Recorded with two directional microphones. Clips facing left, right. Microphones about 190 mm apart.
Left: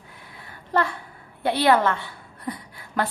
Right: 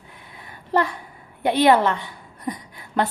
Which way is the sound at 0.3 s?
15° right (ahead or behind).